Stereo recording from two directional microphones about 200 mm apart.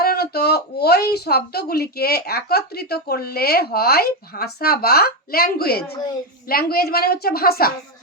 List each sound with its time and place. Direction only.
0.0 s speech: 50° left (ahead or behind)